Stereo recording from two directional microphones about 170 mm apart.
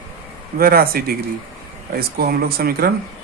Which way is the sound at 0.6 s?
60° right (ahead or behind).